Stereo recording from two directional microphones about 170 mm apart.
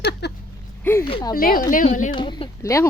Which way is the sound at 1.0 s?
25° left (ahead or behind).